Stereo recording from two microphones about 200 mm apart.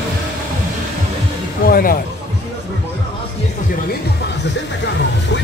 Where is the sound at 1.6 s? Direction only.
45° left (ahead or behind).